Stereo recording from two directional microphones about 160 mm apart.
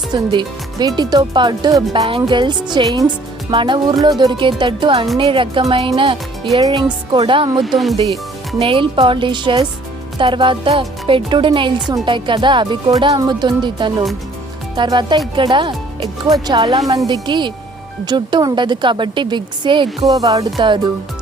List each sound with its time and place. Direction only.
0.1 s speech: 30° right (ahead or behind)
7.6 s speech: centre (ahead or behind)
8.5 s speech: 35° right (ahead or behind)